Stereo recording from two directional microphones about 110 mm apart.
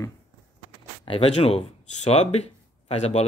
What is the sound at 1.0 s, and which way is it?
Speech, 55° left (ahead or behind).